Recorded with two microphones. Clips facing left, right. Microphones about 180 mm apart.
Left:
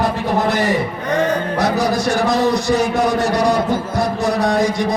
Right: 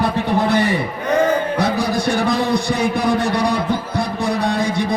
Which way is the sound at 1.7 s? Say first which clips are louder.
Left 2 dB; 55° right (ahead or behind).